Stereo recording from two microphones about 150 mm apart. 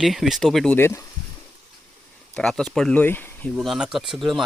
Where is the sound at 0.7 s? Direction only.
15° left (ahead or behind).